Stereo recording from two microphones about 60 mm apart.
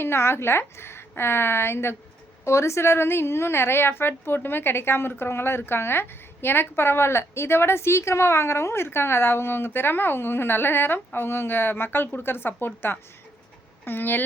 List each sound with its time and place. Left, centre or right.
0.0 s a woman's voice: left